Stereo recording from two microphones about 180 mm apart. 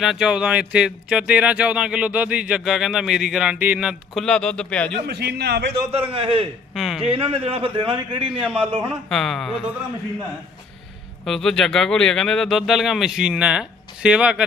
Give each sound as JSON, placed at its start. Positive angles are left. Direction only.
{"t": 0.0, "sound": "speech", "side_deg": 0}
{"t": 5.0, "sound": "a man's voice", "side_deg": -65}
{"t": 5.9, "sound": "a man's voice", "side_deg": -30}
{"t": 6.7, "sound": "speech", "side_deg": 0}
{"t": 7.0, "sound": "a man's voice", "side_deg": -35}
{"t": 8.4, "sound": "a man's voice", "side_deg": -5}
{"t": 11.3, "sound": "speech", "side_deg": 5}